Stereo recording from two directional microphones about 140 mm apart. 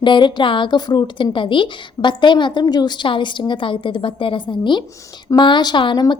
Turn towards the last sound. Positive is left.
turn(degrees=35)  # may be behind; listen again after turning